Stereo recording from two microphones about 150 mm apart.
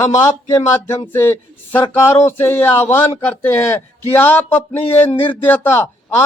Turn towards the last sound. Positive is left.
turn(degrees=15)  # may be behind; listen again after turning